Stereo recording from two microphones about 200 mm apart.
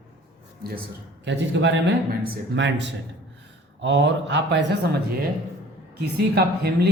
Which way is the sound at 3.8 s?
65° right (ahead or behind).